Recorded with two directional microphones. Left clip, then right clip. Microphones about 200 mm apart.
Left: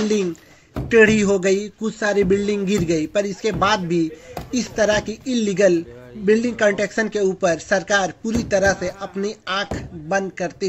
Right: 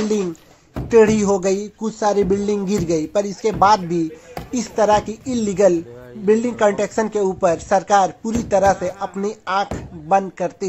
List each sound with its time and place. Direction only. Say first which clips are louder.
0.8 s a man's voice: right 1 dB; 5° left (ahead or behind)
1.9 s speech: right 3 dB; 20° left (ahead or behind)
2.1 s speech: even; 5° left (ahead or behind)